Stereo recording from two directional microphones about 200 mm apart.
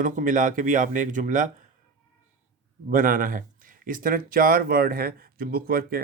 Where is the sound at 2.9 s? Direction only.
45° right (ahead or behind).